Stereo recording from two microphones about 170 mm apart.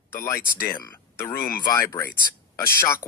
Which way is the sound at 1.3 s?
60° left (ahead or behind).